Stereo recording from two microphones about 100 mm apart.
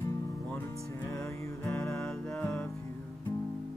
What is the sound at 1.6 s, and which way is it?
Music, 10° left (ahead or behind).